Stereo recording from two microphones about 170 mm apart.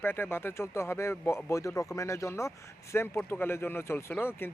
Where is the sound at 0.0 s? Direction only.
15° left (ahead or behind).